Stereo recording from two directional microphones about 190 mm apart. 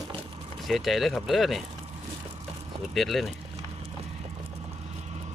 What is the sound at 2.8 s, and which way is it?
Speech, centre (ahead or behind).